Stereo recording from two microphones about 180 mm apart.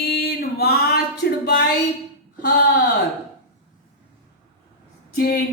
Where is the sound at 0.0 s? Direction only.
60° left (ahead or behind).